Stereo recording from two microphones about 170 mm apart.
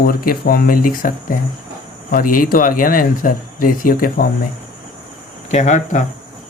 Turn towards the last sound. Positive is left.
turn(degrees=45)  # may be behind; listen again after turning